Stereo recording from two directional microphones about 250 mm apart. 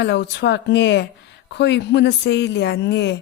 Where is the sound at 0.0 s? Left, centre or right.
Left.